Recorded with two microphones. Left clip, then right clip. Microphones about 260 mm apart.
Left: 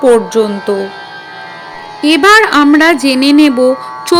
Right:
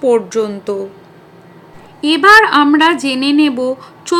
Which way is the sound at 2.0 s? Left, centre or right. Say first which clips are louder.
Left 1 dB; centre.